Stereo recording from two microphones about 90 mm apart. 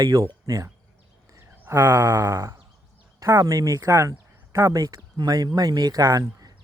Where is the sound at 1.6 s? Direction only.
25° right (ahead or behind).